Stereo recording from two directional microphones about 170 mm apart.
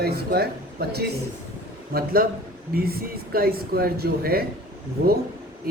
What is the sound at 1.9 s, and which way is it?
Speech, 60° right (ahead or behind).